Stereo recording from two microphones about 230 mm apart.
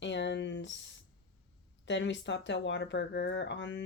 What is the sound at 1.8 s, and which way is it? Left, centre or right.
Speech, left.